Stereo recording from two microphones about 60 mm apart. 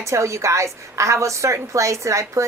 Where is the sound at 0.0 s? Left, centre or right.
Right.